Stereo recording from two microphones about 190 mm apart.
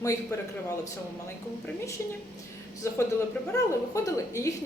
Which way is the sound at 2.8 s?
15° left (ahead or behind).